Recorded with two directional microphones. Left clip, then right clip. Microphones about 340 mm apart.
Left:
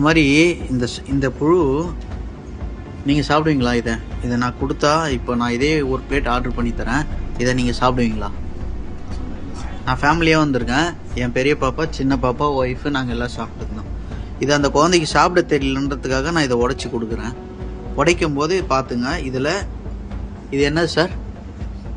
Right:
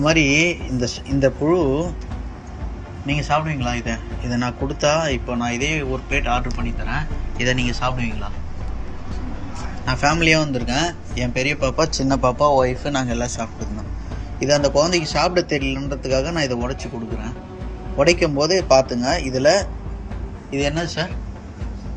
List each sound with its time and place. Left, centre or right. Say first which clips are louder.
0.0 s speech: left 2 dB; centre
3.1 s speech: left 4 dB; centre
9.8 s speech: left 1 dB; centre
14.3 s speech: left 1 dB; centre
20.5 s speech: left 5 dB; centre